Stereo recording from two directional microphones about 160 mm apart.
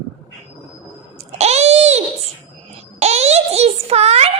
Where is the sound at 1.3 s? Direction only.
45° right (ahead or behind).